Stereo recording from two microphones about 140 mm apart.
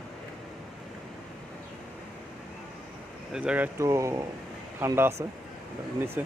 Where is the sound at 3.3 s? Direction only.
10° right (ahead or behind).